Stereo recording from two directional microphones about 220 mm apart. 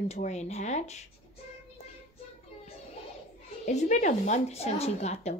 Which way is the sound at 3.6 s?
35° left (ahead or behind).